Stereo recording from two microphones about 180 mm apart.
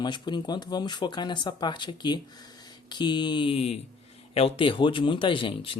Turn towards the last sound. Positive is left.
turn(degrees=30)  # may be behind; listen again after turning